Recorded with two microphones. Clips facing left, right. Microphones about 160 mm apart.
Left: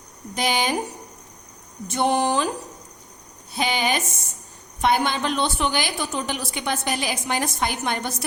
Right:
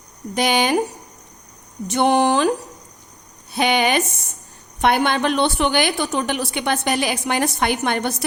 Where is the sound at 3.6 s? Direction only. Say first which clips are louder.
Right 5 dB; 65° right (ahead or behind).